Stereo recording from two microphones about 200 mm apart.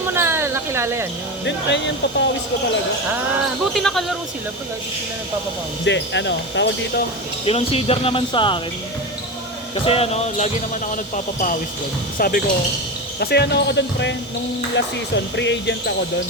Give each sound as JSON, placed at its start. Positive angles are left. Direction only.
{"t": 0.0, "sound": "a sound", "side_deg": -10}
{"t": 1.5, "sound": "speech", "side_deg": 65}
{"t": 3.8, "sound": "speech", "side_deg": 0}
{"t": 5.8, "sound": "speech", "side_deg": 60}
{"t": 7.4, "sound": "speech", "side_deg": 30}
{"t": 9.7, "sound": "speech", "side_deg": 30}
{"t": 12.1, "sound": "speech", "side_deg": 45}